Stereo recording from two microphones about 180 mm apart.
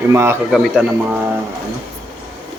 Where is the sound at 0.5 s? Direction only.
5° right (ahead or behind).